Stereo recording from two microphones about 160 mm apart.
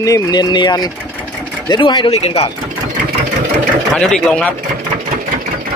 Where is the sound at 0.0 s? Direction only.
25° left (ahead or behind); by 2.5 s 40° left (ahead or behind).